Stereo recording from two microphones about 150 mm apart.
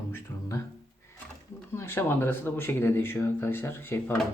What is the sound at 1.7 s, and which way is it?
Speech, 15° left (ahead or behind).